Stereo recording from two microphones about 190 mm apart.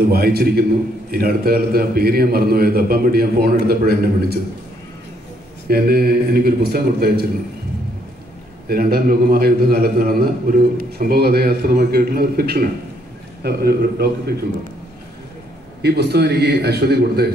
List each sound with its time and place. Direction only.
0.1 s a man's voice: 55° right (ahead or behind)
5.7 s a man's voice: 55° right (ahead or behind)
8.6 s a man's voice: 55° right (ahead or behind)
15.8 s a man's voice: 60° right (ahead or behind)